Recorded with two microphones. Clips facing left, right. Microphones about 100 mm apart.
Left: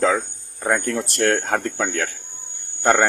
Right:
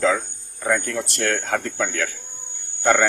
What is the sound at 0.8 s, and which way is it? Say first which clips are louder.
Speech: left 4 dB; 45° left (ahead or behind).